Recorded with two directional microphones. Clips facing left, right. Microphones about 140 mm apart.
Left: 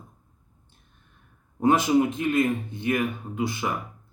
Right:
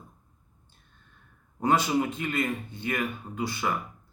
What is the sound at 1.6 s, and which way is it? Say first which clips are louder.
Speech: left 4 dB; 20° left (ahead or behind).